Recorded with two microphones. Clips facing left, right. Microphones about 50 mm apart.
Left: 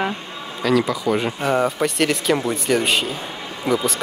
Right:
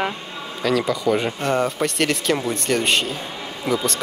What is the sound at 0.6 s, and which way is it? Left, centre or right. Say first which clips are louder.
Speech: left 1 dB; centre.